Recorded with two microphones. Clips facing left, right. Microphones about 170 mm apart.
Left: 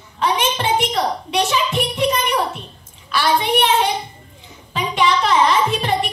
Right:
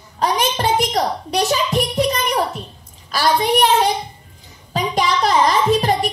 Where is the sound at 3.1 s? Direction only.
40° right (ahead or behind).